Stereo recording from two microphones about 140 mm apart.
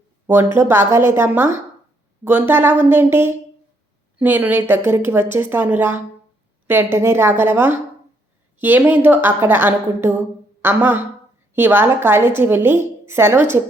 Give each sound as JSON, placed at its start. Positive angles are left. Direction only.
{"t": 0.3, "sound": "a woman's voice", "side_deg": -20}